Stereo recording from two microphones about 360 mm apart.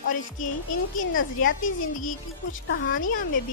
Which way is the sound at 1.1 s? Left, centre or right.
Left.